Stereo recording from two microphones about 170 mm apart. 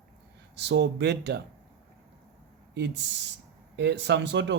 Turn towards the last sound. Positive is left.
turn(degrees=-90)